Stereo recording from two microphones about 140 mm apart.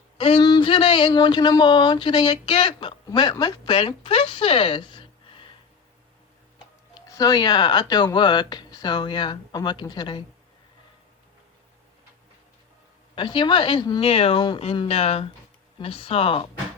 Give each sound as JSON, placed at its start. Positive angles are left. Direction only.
{"t": 0.2, "sound": "speech", "side_deg": 40}
{"t": 3.1, "sound": "speech", "side_deg": 30}
{"t": 7.1, "sound": "speech", "side_deg": 25}
{"t": 13.1, "sound": "speech", "side_deg": 35}
{"t": 14.0, "sound": "speech", "side_deg": 45}